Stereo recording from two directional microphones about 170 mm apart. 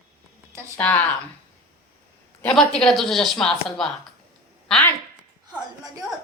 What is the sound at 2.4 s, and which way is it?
Speech, 5° left (ahead or behind).